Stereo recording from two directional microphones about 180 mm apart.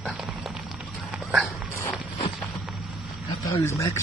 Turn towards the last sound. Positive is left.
turn(degrees=15)  # may be behind; listen again after turning